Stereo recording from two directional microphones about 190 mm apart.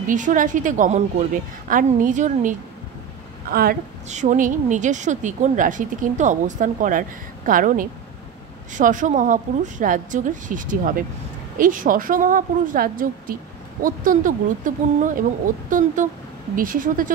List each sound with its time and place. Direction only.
0.1 s a woman's voice: 45° right (ahead or behind)
4.1 s a woman's voice: 40° right (ahead or behind)